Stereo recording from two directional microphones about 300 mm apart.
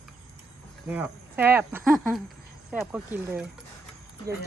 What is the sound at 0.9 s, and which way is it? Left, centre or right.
Speech, centre.